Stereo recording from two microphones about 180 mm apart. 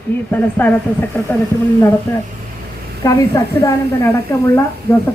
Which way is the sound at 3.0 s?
20° left (ahead or behind).